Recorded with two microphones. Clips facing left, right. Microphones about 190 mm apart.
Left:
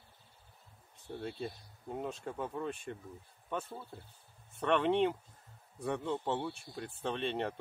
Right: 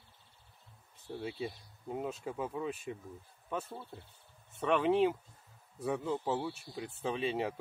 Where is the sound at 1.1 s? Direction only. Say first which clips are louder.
Right 1 dB; 5° right (ahead or behind).